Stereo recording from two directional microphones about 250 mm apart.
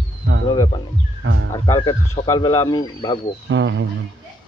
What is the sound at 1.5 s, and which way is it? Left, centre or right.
Speech, centre.